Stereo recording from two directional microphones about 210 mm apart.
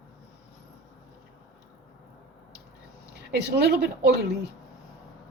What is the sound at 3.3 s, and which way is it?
Speech, 50° right (ahead or behind).